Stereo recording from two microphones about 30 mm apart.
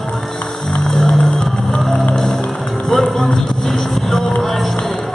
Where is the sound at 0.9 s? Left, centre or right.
Centre.